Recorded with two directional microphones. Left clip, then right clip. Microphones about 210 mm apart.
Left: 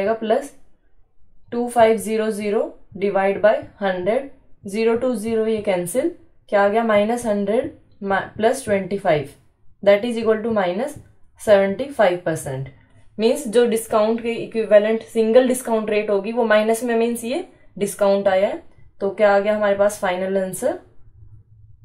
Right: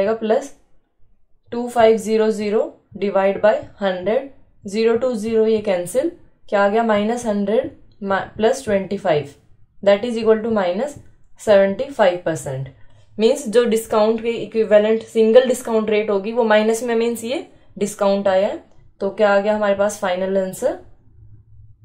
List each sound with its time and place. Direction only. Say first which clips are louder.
0.0 s a woman's voice: right 2 dB; 25° right (ahead or behind)
1.5 s a woman's voice: right 1 dB; 30° right (ahead or behind)